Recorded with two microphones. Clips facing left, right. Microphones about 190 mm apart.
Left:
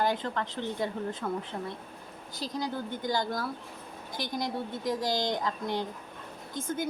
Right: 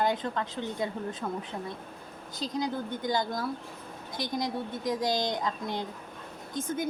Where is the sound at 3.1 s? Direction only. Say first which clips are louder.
Right 1 dB; 20° right (ahead or behind).